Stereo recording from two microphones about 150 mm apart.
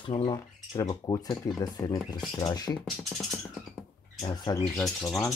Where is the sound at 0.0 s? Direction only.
30° left (ahead or behind).